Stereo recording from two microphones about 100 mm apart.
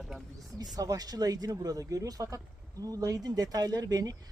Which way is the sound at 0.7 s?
40° right (ahead or behind).